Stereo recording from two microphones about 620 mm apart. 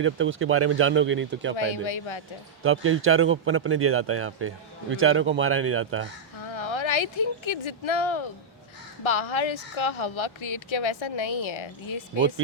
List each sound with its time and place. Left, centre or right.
0.0 s a man's voice: centre
1.5 s speech: left
2.6 s a man's voice: centre
6.5 s speech: left